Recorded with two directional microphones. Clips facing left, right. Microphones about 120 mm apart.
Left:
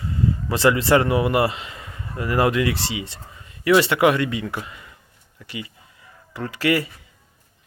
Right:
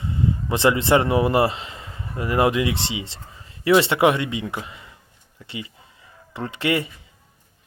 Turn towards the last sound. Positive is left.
turn(degrees=-25)  # may be behind; listen again after turning